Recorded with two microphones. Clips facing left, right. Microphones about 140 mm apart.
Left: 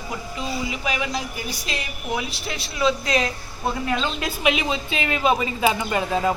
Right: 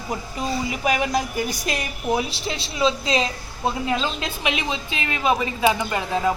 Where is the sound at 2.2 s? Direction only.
30° right (ahead or behind).